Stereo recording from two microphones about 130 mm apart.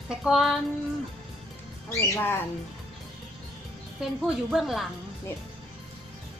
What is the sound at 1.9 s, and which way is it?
Speech, 25° left (ahead or behind).